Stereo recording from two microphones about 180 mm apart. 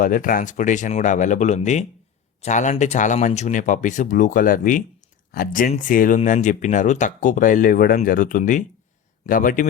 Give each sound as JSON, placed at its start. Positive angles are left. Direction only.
{"t": 0.0, "sound": "speech", "side_deg": 50}